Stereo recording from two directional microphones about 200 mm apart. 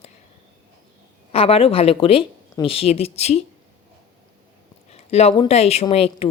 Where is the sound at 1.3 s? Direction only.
30° left (ahead or behind).